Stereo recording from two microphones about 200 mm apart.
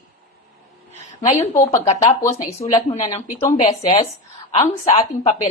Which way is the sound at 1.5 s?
15° left (ahead or behind).